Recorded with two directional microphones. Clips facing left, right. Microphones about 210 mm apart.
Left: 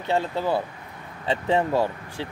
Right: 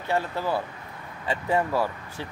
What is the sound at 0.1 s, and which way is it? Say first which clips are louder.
Speech: left 3 dB; 20° left (ahead or behind).